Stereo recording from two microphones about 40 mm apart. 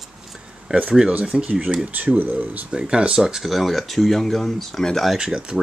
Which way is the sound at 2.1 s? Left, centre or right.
Right.